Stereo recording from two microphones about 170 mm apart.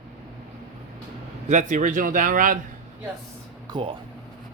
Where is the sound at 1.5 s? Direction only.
45° right (ahead or behind).